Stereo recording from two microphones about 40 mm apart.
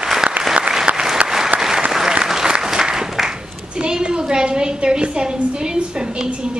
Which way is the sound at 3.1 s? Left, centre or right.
Centre.